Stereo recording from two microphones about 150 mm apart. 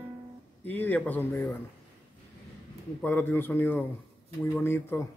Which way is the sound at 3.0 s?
10° left (ahead or behind).